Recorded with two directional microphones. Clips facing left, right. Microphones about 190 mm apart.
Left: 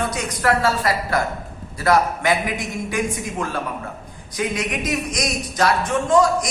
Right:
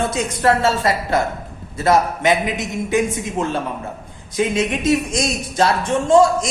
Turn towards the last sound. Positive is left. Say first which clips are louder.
# right 3 dB
turn(degrees=-25)  # may be behind; listen again after turning